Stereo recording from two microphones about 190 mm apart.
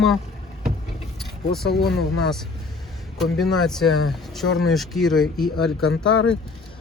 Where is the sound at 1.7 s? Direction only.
60° left (ahead or behind).